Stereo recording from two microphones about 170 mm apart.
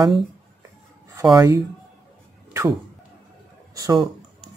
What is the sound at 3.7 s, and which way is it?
Speech, 20° right (ahead or behind).